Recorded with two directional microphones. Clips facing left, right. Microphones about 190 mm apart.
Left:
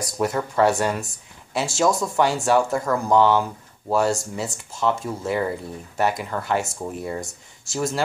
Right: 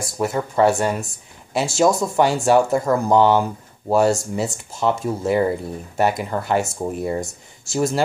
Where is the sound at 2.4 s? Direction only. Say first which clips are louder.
Right 4 dB; 25° right (ahead or behind).